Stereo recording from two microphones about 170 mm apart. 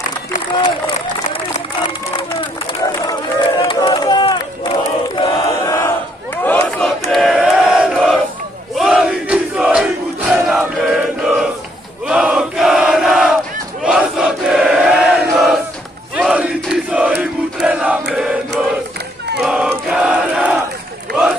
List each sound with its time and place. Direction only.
0.6 s run: 30° left (ahead or behind); by 6.6 s 10° left (ahead or behind)
6.8 s battle cry: centre (ahead or behind)
8.7 s crowd: 5° right (ahead or behind)
12.1 s battle cry: 5° right (ahead or behind)
13.8 s a sound: 5° right (ahead or behind)
16.2 s crowd: 5° right (ahead or behind)
19.4 s battle cry: 5° right (ahead or behind)
21.1 s run: 5° right (ahead or behind)